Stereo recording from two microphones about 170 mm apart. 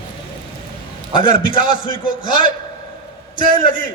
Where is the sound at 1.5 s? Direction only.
30° left (ahead or behind).